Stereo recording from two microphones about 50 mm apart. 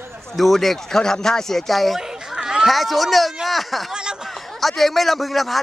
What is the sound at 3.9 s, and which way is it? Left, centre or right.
Speech, centre.